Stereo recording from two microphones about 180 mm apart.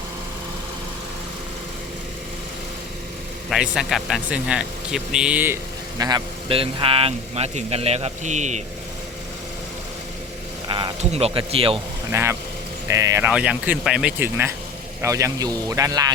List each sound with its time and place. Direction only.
3.5 s speech: centre (ahead or behind)
6.0 s speech: 20° right (ahead or behind); by 8.6 s 40° right (ahead or behind)
10.7 s speech: 25° right (ahead or behind)
12.1 s speech: 15° right (ahead or behind)